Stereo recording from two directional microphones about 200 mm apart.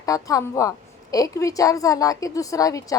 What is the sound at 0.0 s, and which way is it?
A woman's voice, 15° left (ahead or behind).